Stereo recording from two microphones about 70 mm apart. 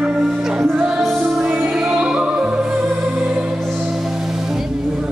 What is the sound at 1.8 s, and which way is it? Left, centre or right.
Opera, centre.